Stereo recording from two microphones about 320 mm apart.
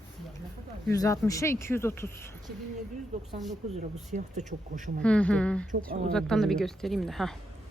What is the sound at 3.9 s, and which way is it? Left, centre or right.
Speech, right.